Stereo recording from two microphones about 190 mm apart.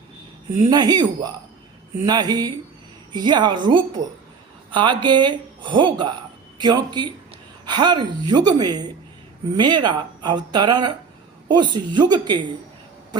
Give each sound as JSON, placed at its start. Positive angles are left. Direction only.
{"t": 0.7, "sound": "speech", "side_deg": -20}